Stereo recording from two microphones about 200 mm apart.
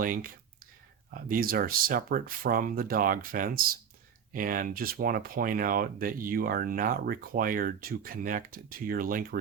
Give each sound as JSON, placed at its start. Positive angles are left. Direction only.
{"t": 0.0, "sound": "speech", "side_deg": -45}